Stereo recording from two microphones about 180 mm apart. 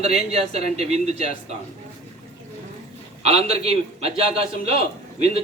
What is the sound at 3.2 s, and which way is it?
A man's voice, 35° right (ahead or behind).